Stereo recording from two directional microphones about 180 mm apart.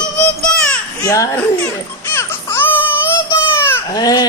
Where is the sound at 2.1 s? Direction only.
15° left (ahead or behind).